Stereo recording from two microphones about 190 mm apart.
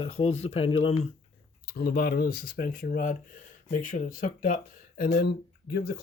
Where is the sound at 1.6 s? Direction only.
50° left (ahead or behind).